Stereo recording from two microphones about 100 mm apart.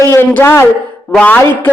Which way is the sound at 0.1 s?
25° left (ahead or behind).